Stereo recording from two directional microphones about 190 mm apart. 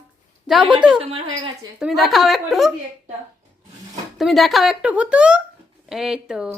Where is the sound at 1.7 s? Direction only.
Centre (ahead or behind).